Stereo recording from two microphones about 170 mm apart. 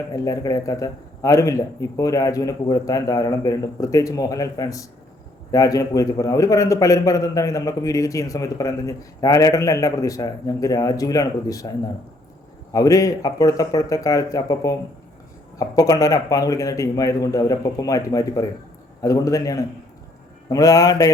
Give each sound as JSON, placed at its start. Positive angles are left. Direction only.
{"t": 0.1, "sound": "a man's voice", "side_deg": 20}
{"t": 12.7, "sound": "a man's voice", "side_deg": 20}